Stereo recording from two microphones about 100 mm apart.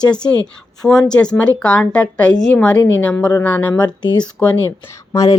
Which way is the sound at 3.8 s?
45° left (ahead or behind).